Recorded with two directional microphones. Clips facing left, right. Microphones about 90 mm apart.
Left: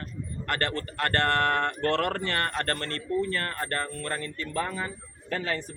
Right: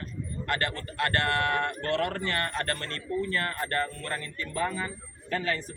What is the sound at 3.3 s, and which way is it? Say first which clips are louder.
A man's voice: right 1 dB; 40° left (ahead or behind).